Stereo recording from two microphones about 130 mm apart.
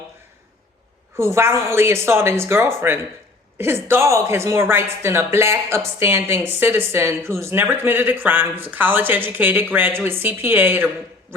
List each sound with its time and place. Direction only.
1.1 s speech: 20° right (ahead or behind)